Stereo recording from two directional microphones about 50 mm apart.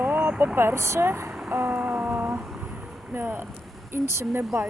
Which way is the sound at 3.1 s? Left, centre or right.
Right.